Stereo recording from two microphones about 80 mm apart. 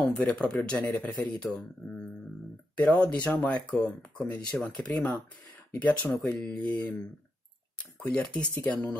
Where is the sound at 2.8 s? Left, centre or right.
Centre.